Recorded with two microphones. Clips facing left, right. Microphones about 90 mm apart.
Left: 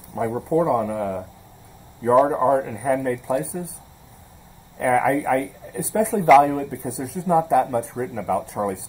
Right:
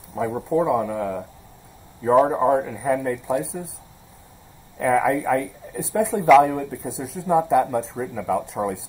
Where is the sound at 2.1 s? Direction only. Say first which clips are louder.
Even; centre (ahead or behind).